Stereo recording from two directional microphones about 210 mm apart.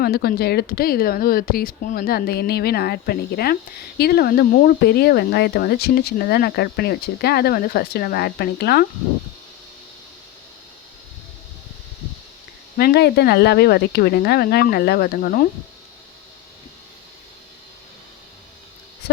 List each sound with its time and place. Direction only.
0.0 s speech: 45° left (ahead or behind)
12.7 s speech: 50° left (ahead or behind)